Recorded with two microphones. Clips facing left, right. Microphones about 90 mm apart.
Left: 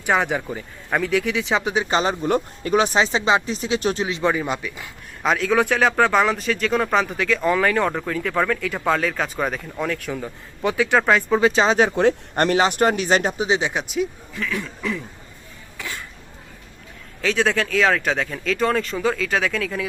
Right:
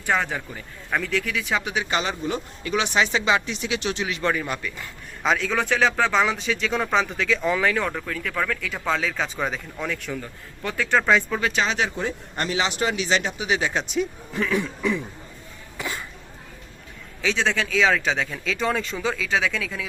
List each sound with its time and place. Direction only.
0.0 s speech: 15° left (ahead or behind); by 2.1 s 35° left (ahead or behind)
2.2 s speech: 45° left (ahead or behind)
4.2 s speech: 15° left (ahead or behind)
4.8 s a man's voice: centre (ahead or behind)
7.8 s a man's voice: 15° left (ahead or behind)
10.6 s speech: 15° left (ahead or behind)
11.3 s speech: 25° left (ahead or behind)
11.9 s speech: 70° left (ahead or behind); by 13.5 s 45° left (ahead or behind)
13.5 s speech: 20° left (ahead or behind)
14.5 s a man's voice: 5° right (ahead or behind)
15.8 s cough: 10° right (ahead or behind)
17.2 s a man's voice: centre (ahead or behind)